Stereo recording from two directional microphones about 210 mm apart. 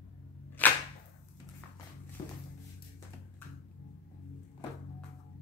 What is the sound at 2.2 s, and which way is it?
Music, 15° left (ahead or behind).